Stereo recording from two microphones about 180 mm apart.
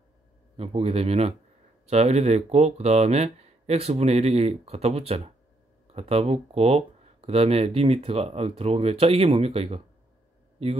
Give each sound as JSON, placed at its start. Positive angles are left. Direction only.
{"t": 0.6, "sound": "speech", "side_deg": -35}